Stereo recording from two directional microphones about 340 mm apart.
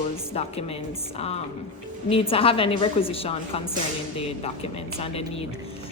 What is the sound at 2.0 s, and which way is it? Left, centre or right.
Speech, centre.